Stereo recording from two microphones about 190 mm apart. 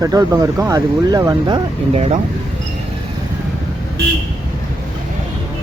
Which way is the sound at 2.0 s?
35° right (ahead or behind).